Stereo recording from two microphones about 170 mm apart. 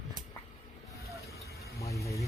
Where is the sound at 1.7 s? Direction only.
20° left (ahead or behind).